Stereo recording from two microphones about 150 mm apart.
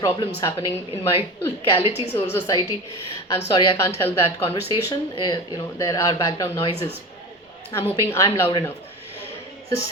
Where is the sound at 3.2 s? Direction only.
25° left (ahead or behind).